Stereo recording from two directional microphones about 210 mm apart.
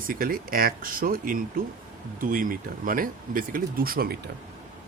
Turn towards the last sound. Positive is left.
turn(degrees=-45)  # may be behind; listen again after turning